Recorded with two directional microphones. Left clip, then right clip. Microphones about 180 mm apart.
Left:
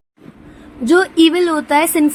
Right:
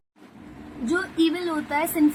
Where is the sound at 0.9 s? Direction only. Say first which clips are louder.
Left 12 dB; 40° left (ahead or behind).